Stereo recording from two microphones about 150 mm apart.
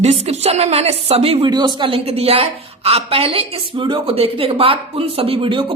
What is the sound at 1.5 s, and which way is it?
A woman's voice, 30° right (ahead or behind).